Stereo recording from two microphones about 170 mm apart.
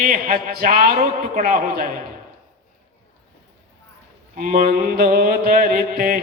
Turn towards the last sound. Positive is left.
turn(degrees=-55)  # may be behind; listen again after turning